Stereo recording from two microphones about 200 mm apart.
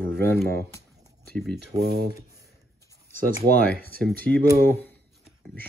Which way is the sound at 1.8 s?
50° right (ahead or behind).